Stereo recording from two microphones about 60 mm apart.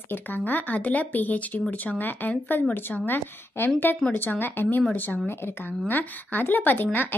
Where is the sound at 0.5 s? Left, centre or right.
Left.